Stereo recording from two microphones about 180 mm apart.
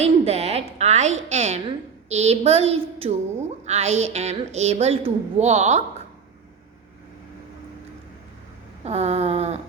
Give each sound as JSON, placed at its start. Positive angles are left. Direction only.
{"t": 0.0, "sound": "a woman's voice", "side_deg": -35}
{"t": 8.8, "sound": "a woman's voice", "side_deg": -35}